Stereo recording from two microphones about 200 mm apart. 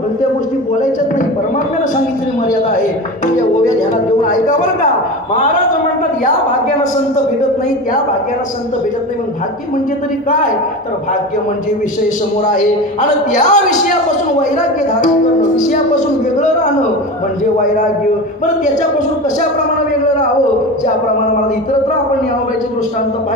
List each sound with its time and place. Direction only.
3.3 s speech: 40° left (ahead or behind)
12.5 s speech: 40° left (ahead or behind)